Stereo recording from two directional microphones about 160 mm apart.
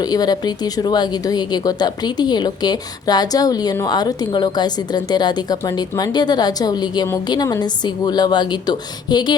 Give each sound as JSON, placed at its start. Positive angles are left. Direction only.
{"t": 0.0, "sound": "a woman's voice", "side_deg": 25}